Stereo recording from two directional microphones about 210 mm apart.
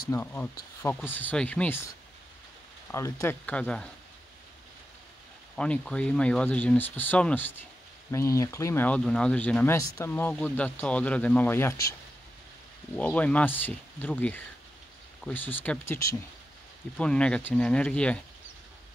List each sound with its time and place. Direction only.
0.1 s speech: 10° left (ahead or behind)
2.9 s speech: 15° left (ahead or behind)
5.6 s speech: 5° left (ahead or behind)
12.9 s speech: 5° left (ahead or behind)